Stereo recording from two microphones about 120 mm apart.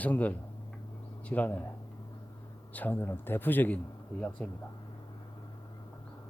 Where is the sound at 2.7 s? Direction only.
15° left (ahead or behind).